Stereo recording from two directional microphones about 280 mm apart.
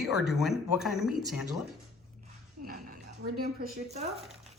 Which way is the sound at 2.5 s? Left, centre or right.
Right.